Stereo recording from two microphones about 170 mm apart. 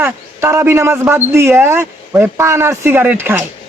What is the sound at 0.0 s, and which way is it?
Speech, 15° right (ahead or behind).